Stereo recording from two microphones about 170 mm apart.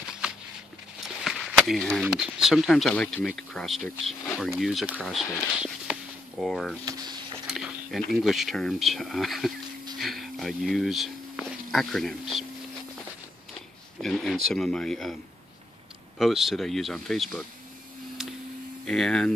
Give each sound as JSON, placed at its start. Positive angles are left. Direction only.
{"t": 1.0, "sound": "speech", "side_deg": 0}
{"t": 6.8, "sound": "a sound", "side_deg": -25}
{"t": 7.4, "sound": "a sound", "side_deg": -5}
{"t": 8.0, "sound": "speech", "side_deg": 0}
{"t": 14.0, "sound": "speech", "side_deg": 0}
{"t": 16.2, "sound": "speech", "side_deg": 0}
{"t": 18.9, "sound": "speech", "side_deg": 5}